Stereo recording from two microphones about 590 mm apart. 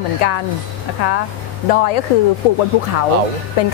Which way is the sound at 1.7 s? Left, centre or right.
Left.